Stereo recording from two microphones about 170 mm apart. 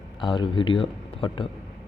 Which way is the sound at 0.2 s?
30° left (ahead or behind).